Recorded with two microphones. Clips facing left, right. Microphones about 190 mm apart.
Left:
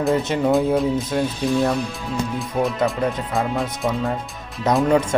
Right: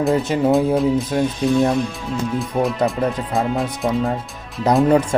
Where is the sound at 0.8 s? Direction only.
Centre (ahead or behind).